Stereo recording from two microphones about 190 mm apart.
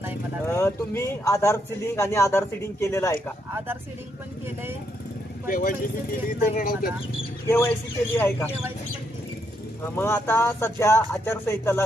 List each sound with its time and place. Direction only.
0.4 s a man's voice: 15° left (ahead or behind)
5.5 s speech: 45° left (ahead or behind)
7.4 s a man's voice: 10° left (ahead or behind)
9.9 s a man's voice: 10° left (ahead or behind)